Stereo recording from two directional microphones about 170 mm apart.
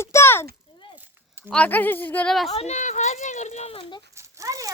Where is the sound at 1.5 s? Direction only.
10° left (ahead or behind).